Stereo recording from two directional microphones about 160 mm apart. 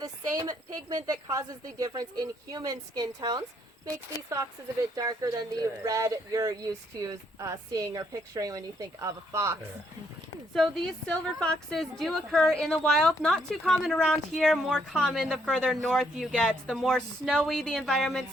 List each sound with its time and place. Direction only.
0.0 s speech: 25° right (ahead or behind)
11.1 s a woman's voice: 5° left (ahead or behind)